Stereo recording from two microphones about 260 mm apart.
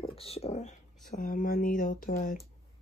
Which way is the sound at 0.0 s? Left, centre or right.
Left.